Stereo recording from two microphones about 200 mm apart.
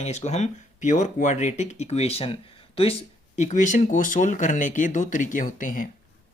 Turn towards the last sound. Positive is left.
turn(degrees=40)  # may be behind; listen again after turning